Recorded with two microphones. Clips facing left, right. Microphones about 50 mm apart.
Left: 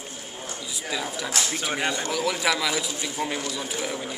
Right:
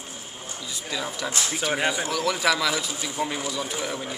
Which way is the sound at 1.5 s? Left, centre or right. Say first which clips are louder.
Right 2 dB; centre.